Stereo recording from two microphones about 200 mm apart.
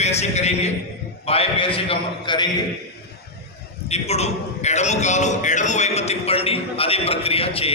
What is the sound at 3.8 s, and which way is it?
A man's voice, 30° left (ahead or behind).